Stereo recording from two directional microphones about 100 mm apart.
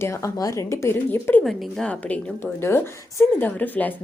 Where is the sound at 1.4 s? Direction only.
Centre (ahead or behind).